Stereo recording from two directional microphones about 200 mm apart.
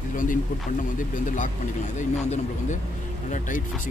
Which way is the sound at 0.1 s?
40° left (ahead or behind).